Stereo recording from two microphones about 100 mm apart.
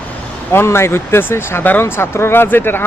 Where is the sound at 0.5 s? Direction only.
25° left (ahead or behind).